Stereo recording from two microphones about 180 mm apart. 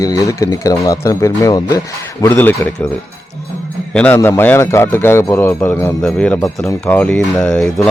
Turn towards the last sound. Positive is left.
turn(degrees=5)  # may be behind; listen again after turning